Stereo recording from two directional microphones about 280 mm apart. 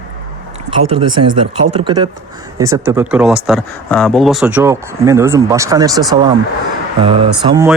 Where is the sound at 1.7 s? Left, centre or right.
Centre.